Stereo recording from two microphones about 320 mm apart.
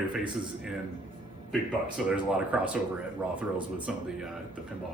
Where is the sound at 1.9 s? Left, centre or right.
Centre.